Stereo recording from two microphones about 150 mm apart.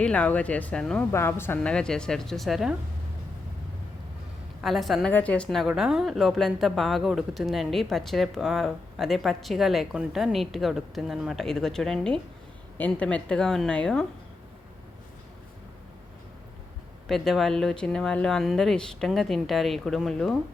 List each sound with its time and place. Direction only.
0.0 s speech: 10° left (ahead or behind)
1.1 s speech: 15° left (ahead or behind)
1.5 s a woman's voice: 5° left (ahead or behind)
4.6 s a woman's voice: centre (ahead or behind)
17.1 s a woman's voice: centre (ahead or behind)